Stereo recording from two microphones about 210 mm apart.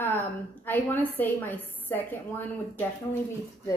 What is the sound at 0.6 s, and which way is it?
Speech, 10° left (ahead or behind).